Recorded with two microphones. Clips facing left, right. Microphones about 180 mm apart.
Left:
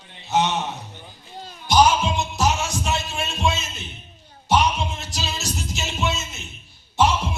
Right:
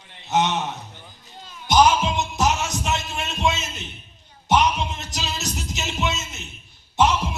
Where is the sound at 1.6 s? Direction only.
20° right (ahead or behind).